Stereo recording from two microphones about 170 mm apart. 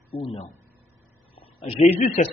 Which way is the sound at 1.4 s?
30° left (ahead or behind).